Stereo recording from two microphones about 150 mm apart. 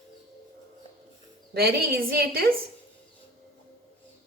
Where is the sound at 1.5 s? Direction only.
90° right.